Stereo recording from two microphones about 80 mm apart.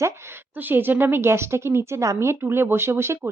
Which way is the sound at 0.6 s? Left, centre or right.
Right.